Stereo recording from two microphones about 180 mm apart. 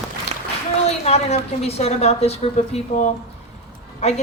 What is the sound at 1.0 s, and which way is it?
A woman's voice, 35° left (ahead or behind).